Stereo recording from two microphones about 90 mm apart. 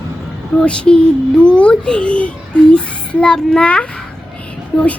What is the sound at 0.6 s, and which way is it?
A child's voice, 10° left (ahead or behind).